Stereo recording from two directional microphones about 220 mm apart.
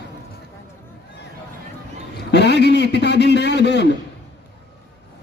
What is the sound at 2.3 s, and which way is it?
A man's voice, 50° left (ahead or behind).